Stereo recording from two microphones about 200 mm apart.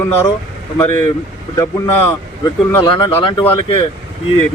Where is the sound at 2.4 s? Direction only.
20° left (ahead or behind).